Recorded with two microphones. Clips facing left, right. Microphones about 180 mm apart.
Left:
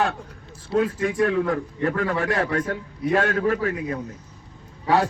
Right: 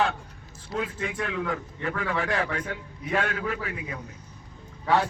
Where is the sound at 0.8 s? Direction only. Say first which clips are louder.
Left 10 dB; 45° left (ahead or behind).